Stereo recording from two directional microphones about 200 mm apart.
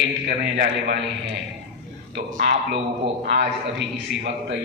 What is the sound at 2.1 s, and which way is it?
Speech, 40° right (ahead or behind).